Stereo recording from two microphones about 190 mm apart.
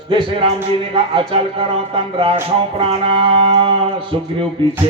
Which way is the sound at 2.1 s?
30° right (ahead or behind).